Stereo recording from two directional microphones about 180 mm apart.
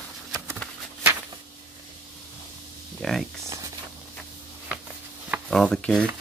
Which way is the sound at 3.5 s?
20° right (ahead or behind).